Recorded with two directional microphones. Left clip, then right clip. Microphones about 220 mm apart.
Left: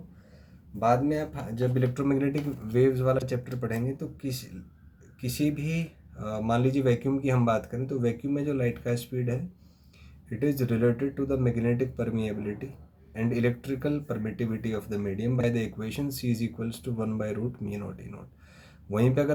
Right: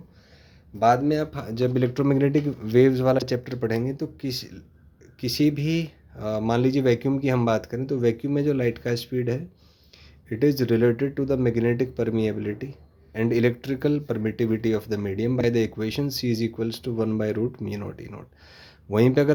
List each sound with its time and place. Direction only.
0.9 s speech: 50° right (ahead or behind)
5.5 s speech: 40° right (ahead or behind)
10.2 s speech: 45° right (ahead or behind)
15.4 s speech: 40° right (ahead or behind)